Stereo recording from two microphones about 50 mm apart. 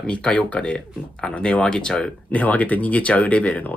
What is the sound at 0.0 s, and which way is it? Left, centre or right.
Speech, left.